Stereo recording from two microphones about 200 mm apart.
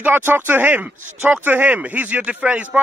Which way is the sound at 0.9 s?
40° right (ahead or behind).